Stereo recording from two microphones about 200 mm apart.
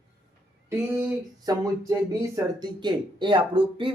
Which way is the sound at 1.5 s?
20° right (ahead or behind).